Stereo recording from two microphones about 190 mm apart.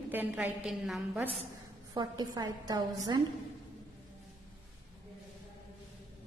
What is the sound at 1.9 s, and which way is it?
A woman's voice, 20° right (ahead or behind).